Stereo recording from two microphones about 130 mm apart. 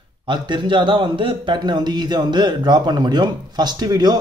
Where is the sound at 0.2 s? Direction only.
35° right (ahead or behind).